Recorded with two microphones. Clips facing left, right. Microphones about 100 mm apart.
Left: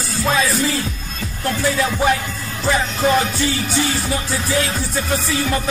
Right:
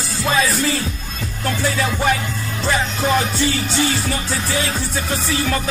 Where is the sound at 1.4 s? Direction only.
Centre (ahead or behind).